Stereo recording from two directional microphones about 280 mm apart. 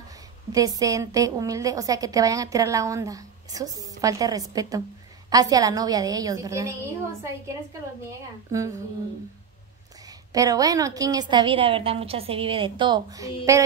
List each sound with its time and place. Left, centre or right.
0.5 s a woman's voice: centre
8.5 s a woman's voice: centre
10.0 s a woman's voice: centre